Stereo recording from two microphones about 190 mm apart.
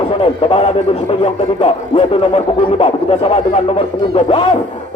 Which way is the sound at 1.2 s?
30° left (ahead or behind).